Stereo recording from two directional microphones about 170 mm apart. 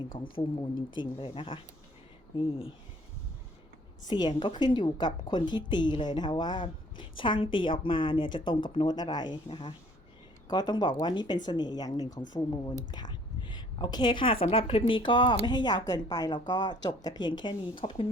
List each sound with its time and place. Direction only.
0.1 s speech: 30° left (ahead or behind)
4.1 s a woman's voice: 25° left (ahead or behind)
12.9 s a sound: 25° left (ahead or behind)
14.4 s a woman's voice: 35° left (ahead or behind)